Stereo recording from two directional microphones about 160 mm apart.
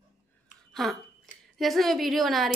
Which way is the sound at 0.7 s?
Centre (ahead or behind).